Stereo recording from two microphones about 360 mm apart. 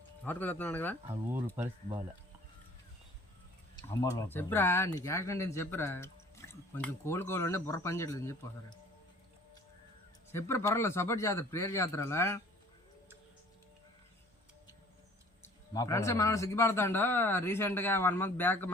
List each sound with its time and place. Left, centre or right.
0.3 s speech: centre
1.0 s speech: centre
3.8 s speech: centre
10.3 s speech: centre
15.7 s speech: centre